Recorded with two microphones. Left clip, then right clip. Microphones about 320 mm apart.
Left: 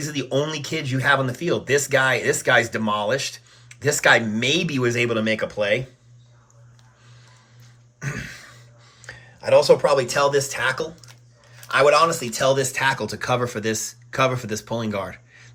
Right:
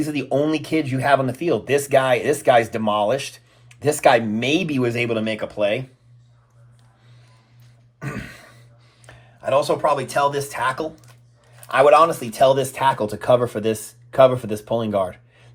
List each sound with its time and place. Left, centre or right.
0.1 s speech: centre
7.9 s throat clearing: centre
9.6 s speech: centre